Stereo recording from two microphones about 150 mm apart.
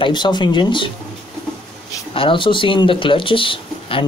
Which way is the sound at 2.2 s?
35° left (ahead or behind).